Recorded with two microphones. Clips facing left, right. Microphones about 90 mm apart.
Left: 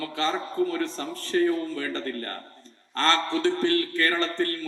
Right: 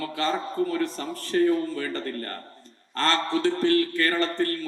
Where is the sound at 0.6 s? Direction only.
40° right (ahead or behind).